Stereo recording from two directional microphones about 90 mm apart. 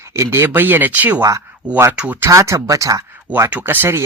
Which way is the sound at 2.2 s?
35° right (ahead or behind).